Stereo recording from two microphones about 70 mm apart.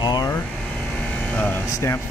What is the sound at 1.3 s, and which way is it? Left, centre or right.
Speech, left.